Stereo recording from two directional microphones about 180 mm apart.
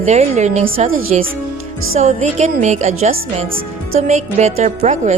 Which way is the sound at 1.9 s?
40° right (ahead or behind).